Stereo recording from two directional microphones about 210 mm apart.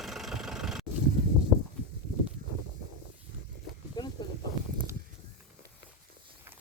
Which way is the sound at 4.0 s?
20° left (ahead or behind).